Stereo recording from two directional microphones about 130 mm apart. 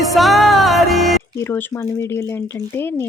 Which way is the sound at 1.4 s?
15° left (ahead or behind).